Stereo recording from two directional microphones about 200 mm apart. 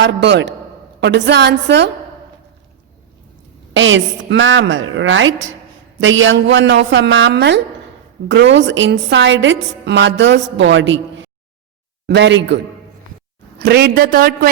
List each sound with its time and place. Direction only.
0.0 s a woman's voice: 60° right (ahead or behind)
3.8 s a woman's voice: 70° right (ahead or behind)
13.6 s a man's voice: 55° right (ahead or behind)